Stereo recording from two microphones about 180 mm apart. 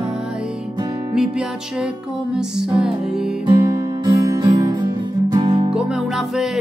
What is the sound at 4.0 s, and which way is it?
Music, 20° right (ahead or behind).